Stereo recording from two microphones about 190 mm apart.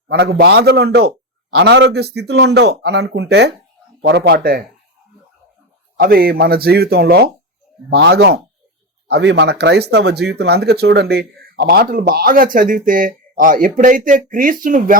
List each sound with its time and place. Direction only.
0.1 s a man's voice: 60° right (ahead or behind)
6.0 s a man's voice: 50° right (ahead or behind)